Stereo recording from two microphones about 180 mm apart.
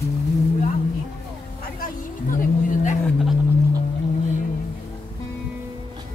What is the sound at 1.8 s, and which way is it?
Vehicle, 50° left (ahead or behind).